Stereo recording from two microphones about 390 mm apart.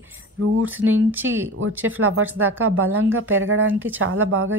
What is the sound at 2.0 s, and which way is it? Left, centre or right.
A woman's voice, right.